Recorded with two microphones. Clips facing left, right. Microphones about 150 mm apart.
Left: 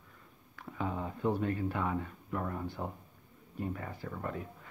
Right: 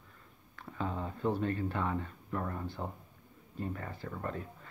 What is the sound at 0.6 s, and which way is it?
Speech, 10° left (ahead or behind).